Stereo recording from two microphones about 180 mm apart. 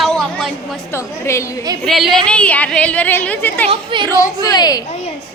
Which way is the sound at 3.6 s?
30° right (ahead or behind).